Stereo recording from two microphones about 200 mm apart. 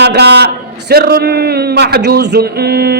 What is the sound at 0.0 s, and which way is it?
A man's voice, 55° right (ahead or behind).